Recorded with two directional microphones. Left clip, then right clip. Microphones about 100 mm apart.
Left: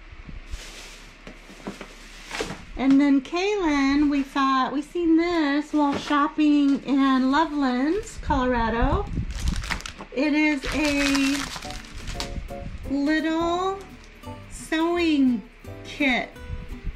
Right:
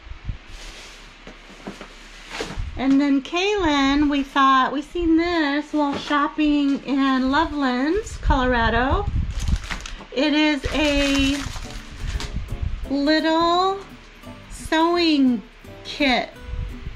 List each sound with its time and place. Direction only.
1.6 s a woman's voice: 15° left (ahead or behind)
9.5 s a sound: 10° left (ahead or behind)
10.6 s speech: 10° left (ahead or behind)
12.2 s music: 10° left (ahead or behind)
13.0 s speech: 20° left (ahead or behind)
14.7 s a woman's voice: 20° left (ahead or behind)